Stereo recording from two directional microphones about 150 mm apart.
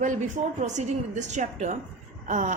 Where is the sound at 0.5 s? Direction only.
50° right (ahead or behind).